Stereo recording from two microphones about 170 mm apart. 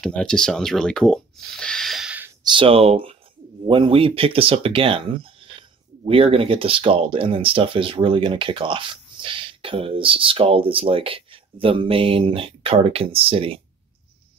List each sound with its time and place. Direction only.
0.0 s speech: 5° left (ahead or behind)
2.4 s speech: 30° right (ahead or behind)